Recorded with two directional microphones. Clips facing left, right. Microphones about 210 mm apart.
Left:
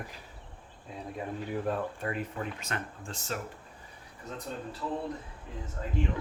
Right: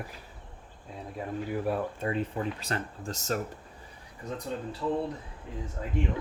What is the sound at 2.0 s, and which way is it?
Speech, 25° right (ahead or behind).